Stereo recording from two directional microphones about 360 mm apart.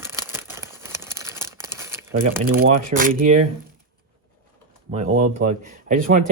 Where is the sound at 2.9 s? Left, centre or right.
Right.